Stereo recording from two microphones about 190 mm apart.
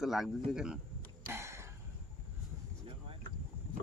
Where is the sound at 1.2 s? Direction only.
15° right (ahead or behind).